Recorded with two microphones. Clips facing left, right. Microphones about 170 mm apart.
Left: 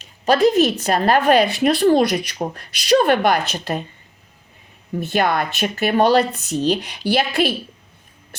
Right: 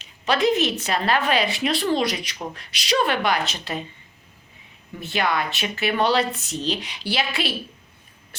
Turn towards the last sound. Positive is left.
turn(degrees=50)  # may be behind; listen again after turning